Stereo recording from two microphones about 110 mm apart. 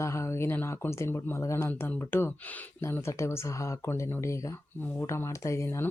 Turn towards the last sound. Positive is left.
turn(degrees=25)  # may be behind; listen again after turning